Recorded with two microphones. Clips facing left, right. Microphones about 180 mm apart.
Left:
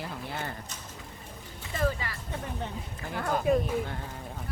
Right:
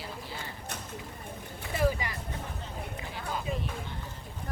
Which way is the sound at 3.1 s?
55° left (ahead or behind).